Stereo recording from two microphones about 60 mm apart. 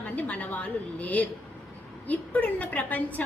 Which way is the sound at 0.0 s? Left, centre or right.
Left.